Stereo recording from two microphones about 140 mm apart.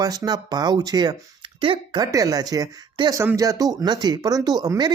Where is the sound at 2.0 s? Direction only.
25° right (ahead or behind).